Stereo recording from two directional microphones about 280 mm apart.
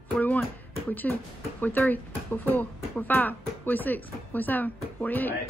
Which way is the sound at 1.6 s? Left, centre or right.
Centre.